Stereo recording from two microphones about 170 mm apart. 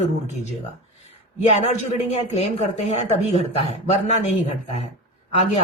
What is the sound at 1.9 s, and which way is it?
A woman's voice, 40° left (ahead or behind).